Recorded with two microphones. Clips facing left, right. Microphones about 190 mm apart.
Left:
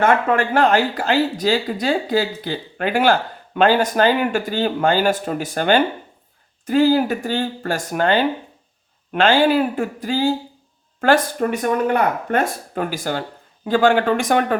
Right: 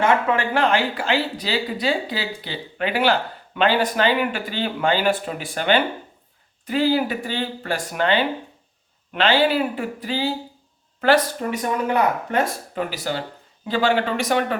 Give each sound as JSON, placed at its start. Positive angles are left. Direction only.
{"t": 0.0, "sound": "speech", "side_deg": 50}